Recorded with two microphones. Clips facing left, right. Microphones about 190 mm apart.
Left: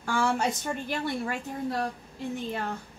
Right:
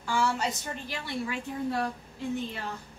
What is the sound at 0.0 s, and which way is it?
A woman's voice, 55° left (ahead or behind).